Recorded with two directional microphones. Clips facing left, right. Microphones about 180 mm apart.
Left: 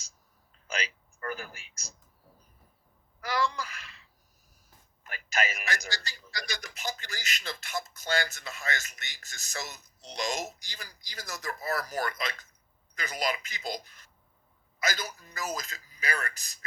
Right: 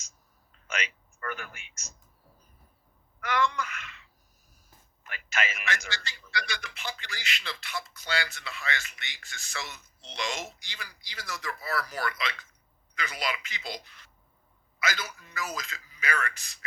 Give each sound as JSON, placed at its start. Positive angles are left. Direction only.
{"t": 0.5, "sound": "speech", "side_deg": 35}
{"t": 3.2, "sound": "a woman's voice", "side_deg": 35}